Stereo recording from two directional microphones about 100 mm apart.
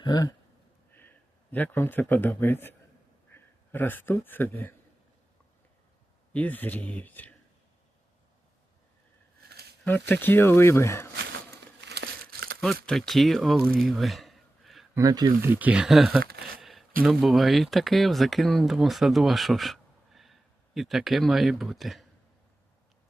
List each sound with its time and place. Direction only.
0.0 s speech: 40° left (ahead or behind)
0.9 s a man's voice: 20° left (ahead or behind)
6.3 s speech: 15° left (ahead or behind)
9.8 s speech: 20° left (ahead or behind)
12.6 s speech: 5° left (ahead or behind)
13.7 s a sound: centre (ahead or behind)
15.0 s speech: 45° right (ahead or behind)
15.4 s speech: 20° right (ahead or behind); by 22.0 s centre (ahead or behind)